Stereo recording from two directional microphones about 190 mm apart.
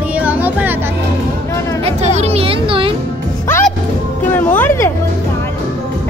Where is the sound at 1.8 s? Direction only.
35° right (ahead or behind).